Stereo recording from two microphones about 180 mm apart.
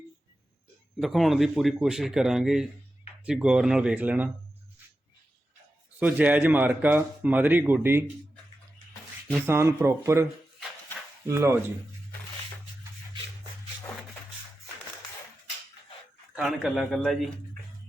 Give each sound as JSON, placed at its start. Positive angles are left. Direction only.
{"t": 0.9, "sound": "a man's voice", "side_deg": 0}
{"t": 6.0, "sound": "speech", "side_deg": -10}
{"t": 9.5, "sound": "speech", "side_deg": -15}
{"t": 11.3, "sound": "speech", "side_deg": -15}
{"t": 16.3, "sound": "speech", "side_deg": 0}